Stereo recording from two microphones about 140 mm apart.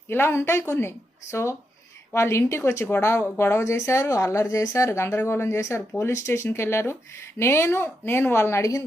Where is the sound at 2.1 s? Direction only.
20° left (ahead or behind).